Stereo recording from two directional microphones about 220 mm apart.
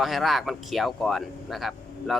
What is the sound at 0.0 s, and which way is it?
Speech, centre (ahead or behind).